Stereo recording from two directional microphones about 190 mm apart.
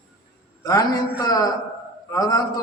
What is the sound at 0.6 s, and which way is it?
A man's voice, 20° left (ahead or behind).